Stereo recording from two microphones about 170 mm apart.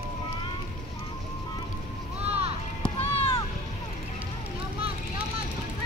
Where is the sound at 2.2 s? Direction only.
35° right (ahead or behind).